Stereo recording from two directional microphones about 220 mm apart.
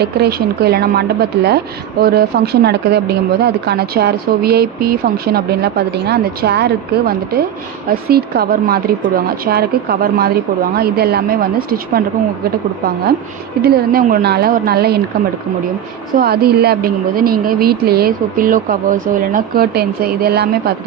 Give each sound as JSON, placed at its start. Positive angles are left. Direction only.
{"t": 0.0, "sound": "speech", "side_deg": -45}
{"t": 13.6, "sound": "speech", "side_deg": -40}
{"t": 16.1, "sound": "speech", "side_deg": -45}